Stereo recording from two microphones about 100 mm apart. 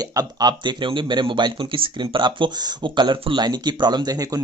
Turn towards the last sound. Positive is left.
turn(degrees=-40)  # may be behind; listen again after turning